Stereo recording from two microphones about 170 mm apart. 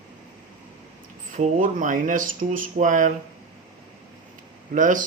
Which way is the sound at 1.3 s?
50° right (ahead or behind).